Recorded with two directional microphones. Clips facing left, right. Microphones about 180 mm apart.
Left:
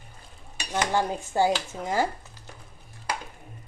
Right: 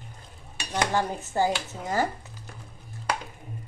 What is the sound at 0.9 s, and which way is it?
Speech, 15° left (ahead or behind).